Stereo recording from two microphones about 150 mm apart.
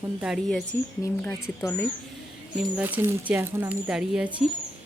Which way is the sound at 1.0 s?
20° left (ahead or behind).